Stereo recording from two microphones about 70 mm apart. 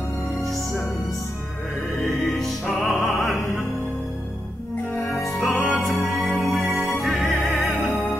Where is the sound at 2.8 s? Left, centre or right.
Left.